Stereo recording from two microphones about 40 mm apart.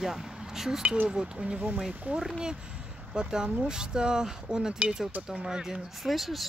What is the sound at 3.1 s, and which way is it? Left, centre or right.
Speech, right.